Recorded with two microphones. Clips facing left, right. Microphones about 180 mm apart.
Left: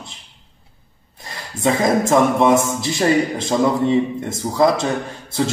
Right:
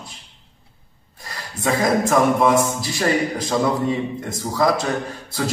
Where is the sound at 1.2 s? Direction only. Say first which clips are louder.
Left 4 dB; 25° left (ahead or behind).